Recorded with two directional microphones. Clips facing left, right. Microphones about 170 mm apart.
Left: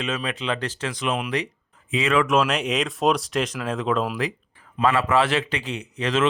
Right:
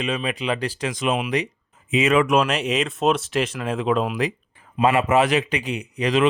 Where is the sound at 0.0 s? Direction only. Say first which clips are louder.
Right 2 dB; 10° right (ahead or behind).